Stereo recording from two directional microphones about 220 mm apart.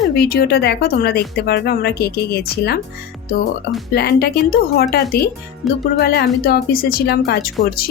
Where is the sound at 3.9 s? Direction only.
45° left (ahead or behind).